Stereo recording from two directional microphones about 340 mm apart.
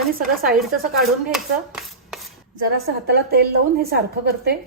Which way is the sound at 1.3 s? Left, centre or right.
Centre.